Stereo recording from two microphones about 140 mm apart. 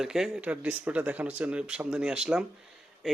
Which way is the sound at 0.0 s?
5° right (ahead or behind).